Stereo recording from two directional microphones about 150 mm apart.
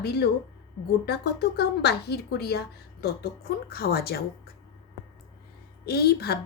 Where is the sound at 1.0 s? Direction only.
90° left.